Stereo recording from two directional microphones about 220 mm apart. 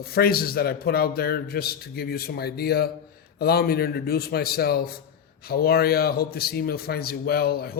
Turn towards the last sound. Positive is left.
turn(degrees=45)  # may be behind; listen again after turning